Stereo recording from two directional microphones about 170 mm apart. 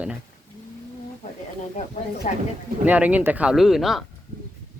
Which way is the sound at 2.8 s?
10° right (ahead or behind).